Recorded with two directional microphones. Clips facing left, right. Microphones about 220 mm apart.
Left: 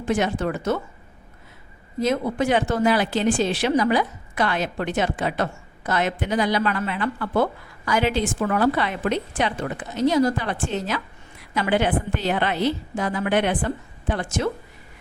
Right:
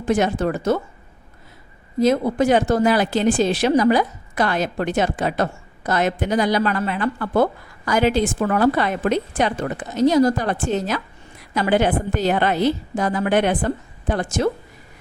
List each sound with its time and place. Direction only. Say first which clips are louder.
0.0 s a woman's voice: right 3 dB; 40° right (ahead or behind)
2.0 s a woman's voice: right 5 dB; 40° right (ahead or behind)